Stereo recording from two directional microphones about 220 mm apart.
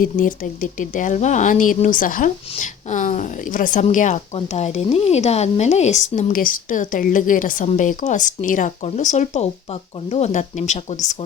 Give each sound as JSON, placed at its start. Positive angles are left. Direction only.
{"t": 0.0, "sound": "speech", "side_deg": 40}